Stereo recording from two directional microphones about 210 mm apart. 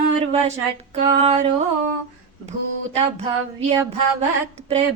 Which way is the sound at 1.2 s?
30° right (ahead or behind).